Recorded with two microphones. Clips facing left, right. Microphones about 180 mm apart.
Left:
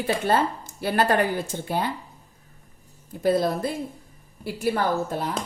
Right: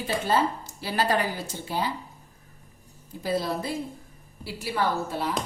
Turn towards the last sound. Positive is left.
turn(degrees=50)  # may be behind; listen again after turning